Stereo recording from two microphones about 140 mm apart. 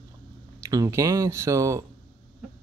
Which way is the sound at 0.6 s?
25° right (ahead or behind).